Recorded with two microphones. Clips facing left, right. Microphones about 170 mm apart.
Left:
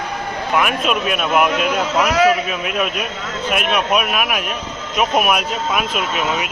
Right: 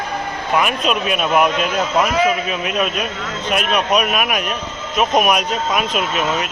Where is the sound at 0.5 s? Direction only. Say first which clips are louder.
Even; 5° left (ahead or behind).